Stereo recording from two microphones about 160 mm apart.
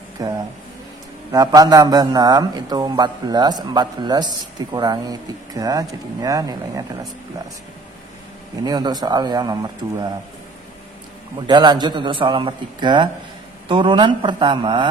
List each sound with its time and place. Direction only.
0.2 s a man's voice: 20° right (ahead or behind)
8.6 s a man's voice: 25° right (ahead or behind)
11.4 s a man's voice: 25° right (ahead or behind)